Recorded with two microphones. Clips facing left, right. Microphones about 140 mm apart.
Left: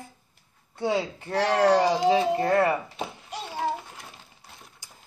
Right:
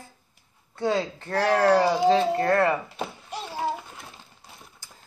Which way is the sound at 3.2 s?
Centre (ahead or behind).